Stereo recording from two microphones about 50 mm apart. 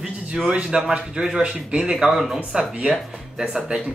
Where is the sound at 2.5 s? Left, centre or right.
Centre.